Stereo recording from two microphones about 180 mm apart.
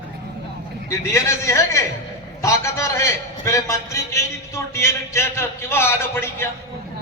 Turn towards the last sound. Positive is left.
turn(degrees=15)  # may be behind; listen again after turning